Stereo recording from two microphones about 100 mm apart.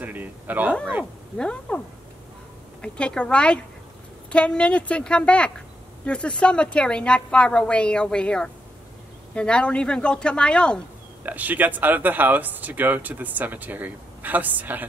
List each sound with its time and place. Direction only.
0.0 s speech: 15° right (ahead or behind)
1.4 s a woman's voice: 10° left (ahead or behind)
2.8 s a woman's voice: 10° left (ahead or behind)
11.2 s speech: 15° right (ahead or behind)